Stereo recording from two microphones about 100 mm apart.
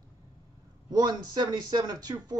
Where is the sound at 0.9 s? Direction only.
40° right (ahead or behind).